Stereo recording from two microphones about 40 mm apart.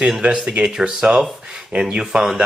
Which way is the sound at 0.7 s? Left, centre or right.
Centre.